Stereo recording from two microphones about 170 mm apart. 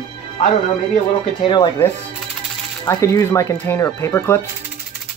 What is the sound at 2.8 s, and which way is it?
Speech, 20° left (ahead or behind).